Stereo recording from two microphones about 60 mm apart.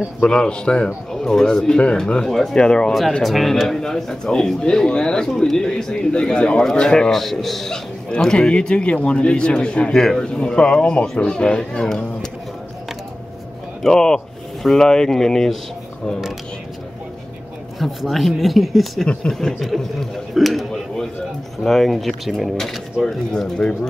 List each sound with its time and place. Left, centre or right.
0.3 s speech: centre
2.2 s speech: centre
2.5 s speech: centre
3.2 s speech: centre
13.8 s speech: centre
17.7 s a man's voice: centre